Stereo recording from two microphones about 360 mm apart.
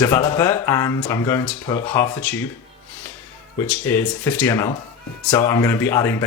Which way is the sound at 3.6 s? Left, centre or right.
Centre.